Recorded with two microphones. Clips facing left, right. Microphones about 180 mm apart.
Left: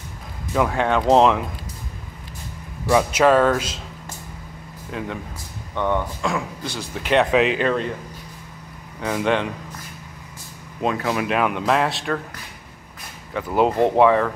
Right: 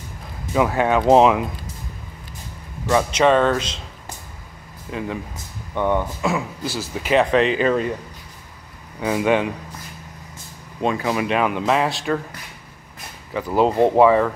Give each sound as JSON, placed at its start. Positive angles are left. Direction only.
{"t": 0.5, "sound": "speech", "side_deg": -5}
{"t": 2.9, "sound": "speech", "side_deg": 5}
{"t": 4.9, "sound": "speech", "side_deg": 0}
{"t": 9.0, "sound": "speech", "side_deg": -5}
{"t": 10.8, "sound": "speech", "side_deg": 0}
{"t": 13.3, "sound": "speech", "side_deg": 0}